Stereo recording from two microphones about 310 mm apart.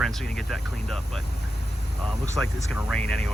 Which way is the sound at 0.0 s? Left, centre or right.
Centre.